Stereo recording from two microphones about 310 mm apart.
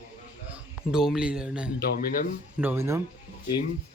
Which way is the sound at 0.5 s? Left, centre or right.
Centre.